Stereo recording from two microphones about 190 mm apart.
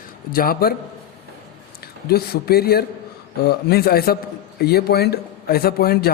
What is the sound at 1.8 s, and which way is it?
A man's voice, 55° left (ahead or behind).